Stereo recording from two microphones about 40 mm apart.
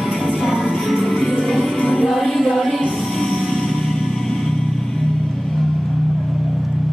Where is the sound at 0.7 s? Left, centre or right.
Centre.